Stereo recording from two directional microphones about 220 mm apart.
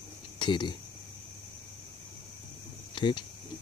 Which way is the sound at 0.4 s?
20° left (ahead or behind).